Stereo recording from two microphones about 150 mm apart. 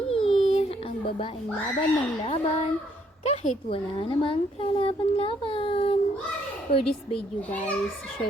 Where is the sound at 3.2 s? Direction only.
45° left (ahead or behind).